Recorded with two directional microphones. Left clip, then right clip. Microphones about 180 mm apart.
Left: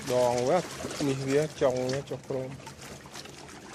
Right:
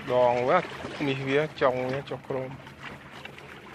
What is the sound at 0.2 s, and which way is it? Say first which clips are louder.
Speech: right 3 dB; 15° left (ahead or behind).